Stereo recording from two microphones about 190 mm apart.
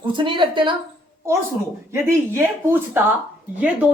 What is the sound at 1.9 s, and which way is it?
A woman's voice, 15° right (ahead or behind).